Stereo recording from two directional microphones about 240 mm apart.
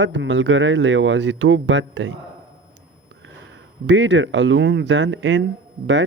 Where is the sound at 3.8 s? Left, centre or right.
Right.